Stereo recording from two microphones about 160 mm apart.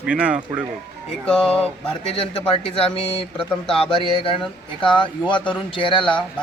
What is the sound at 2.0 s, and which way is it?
Speech, 35° left (ahead or behind).